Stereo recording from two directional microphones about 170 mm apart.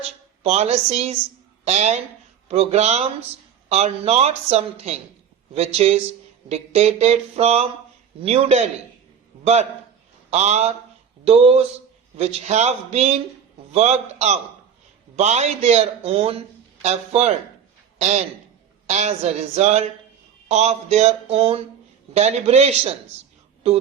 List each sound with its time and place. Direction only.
0.0 s a woman's voice: 40° right (ahead or behind)